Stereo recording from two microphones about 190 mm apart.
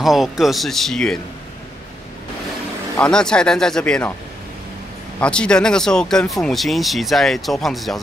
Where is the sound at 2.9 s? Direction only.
5° left (ahead or behind).